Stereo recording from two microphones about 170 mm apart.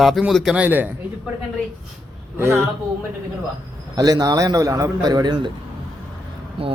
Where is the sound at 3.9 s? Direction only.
25° right (ahead or behind).